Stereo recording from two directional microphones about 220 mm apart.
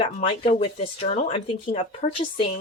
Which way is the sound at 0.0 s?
25° left (ahead or behind).